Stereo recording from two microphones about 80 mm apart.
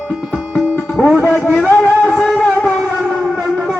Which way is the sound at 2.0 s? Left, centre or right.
Centre.